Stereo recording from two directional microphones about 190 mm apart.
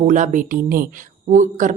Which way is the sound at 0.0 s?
40° right (ahead or behind).